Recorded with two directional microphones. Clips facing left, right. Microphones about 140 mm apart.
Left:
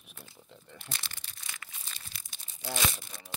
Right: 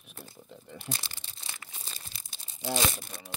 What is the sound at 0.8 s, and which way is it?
Crumpling, 35° right (ahead or behind).